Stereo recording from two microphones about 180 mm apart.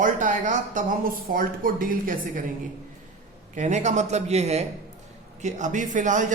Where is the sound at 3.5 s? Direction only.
40° right (ahead or behind).